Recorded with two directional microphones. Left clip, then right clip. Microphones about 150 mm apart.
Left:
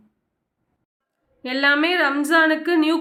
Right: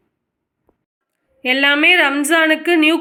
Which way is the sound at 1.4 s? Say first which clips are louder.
Right 5 dB; 20° right (ahead or behind).